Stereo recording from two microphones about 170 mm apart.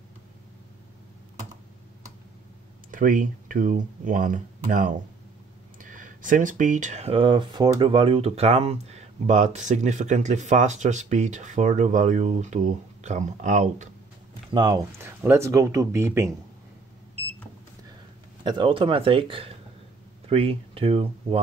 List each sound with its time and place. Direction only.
2.9 s speech: 55° right (ahead or behind)
14.5 s speech: 25° right (ahead or behind)
15.0 s speech: 15° right (ahead or behind)
18.4 s speech: 30° right (ahead or behind)